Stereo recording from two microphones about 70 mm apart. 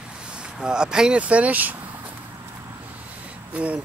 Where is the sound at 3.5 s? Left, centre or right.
Centre.